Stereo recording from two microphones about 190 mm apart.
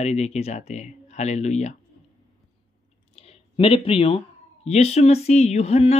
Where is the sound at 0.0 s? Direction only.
35° left (ahead or behind).